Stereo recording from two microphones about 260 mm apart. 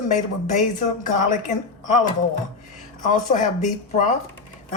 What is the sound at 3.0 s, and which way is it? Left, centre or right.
Speech, left.